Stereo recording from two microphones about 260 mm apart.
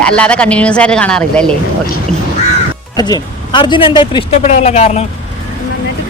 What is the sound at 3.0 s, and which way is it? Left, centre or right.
Speech, centre.